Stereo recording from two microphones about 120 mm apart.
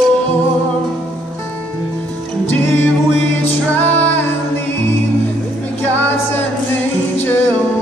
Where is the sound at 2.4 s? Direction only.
20° left (ahead or behind).